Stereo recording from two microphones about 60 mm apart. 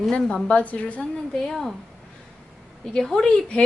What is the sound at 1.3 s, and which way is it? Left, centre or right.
Speech, centre.